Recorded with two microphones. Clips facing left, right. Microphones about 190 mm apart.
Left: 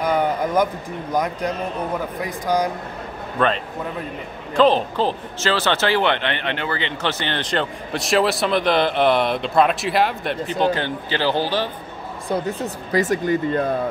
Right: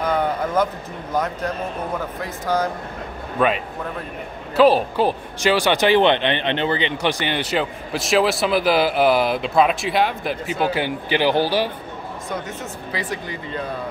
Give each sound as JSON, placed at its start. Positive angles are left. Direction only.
{"t": 0.0, "sound": "a sound", "side_deg": 10}
{"t": 1.1, "sound": "speech", "side_deg": 15}
{"t": 3.3, "sound": "speech", "side_deg": -10}
{"t": 12.3, "sound": "speech", "side_deg": 35}